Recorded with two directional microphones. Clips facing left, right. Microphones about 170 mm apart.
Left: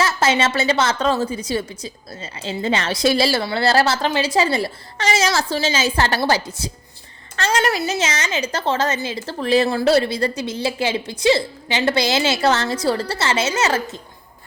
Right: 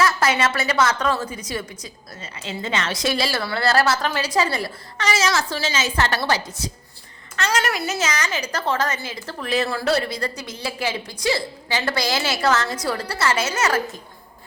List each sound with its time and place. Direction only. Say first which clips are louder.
0.0 s a woman's voice: left 1 dB; 25° left (ahead or behind)